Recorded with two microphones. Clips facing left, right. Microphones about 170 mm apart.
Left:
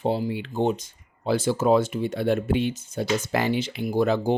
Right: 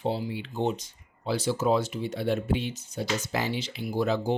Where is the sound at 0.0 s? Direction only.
50° left (ahead or behind).